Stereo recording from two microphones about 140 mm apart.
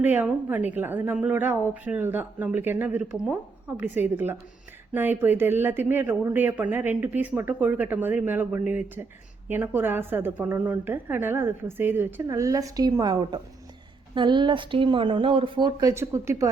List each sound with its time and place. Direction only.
0.0 s a woman's voice: 15° right (ahead or behind)